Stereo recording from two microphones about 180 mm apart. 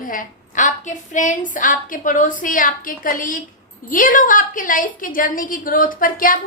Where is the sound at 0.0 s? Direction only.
50° left (ahead or behind).